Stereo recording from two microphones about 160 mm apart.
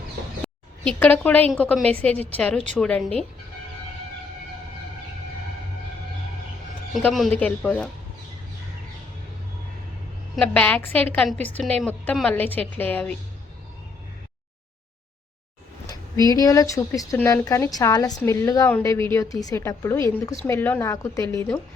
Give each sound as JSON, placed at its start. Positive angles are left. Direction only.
{"t": 0.4, "sound": "a woman's voice", "side_deg": 10}
{"t": 7.1, "sound": "a woman's voice", "side_deg": 5}
{"t": 10.3, "sound": "a woman's voice", "side_deg": 10}
{"t": 15.9, "sound": "a woman's voice", "side_deg": 20}